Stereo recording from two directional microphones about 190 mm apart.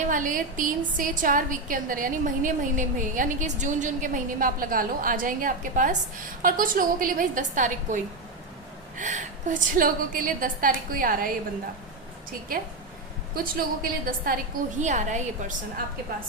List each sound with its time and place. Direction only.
0.0 s a woman's voice: 45° right (ahead or behind)
13.3 s a woman's voice: 50° right (ahead or behind)